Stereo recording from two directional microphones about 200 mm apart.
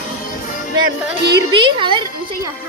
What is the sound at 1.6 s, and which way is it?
Speech, 25° right (ahead or behind).